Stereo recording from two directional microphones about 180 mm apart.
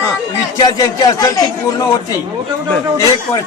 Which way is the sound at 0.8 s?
20° left (ahead or behind).